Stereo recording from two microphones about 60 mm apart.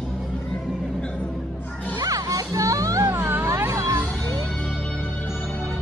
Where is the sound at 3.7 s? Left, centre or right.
Right.